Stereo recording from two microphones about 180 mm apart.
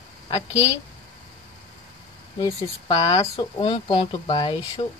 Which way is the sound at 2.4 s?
25° left (ahead or behind).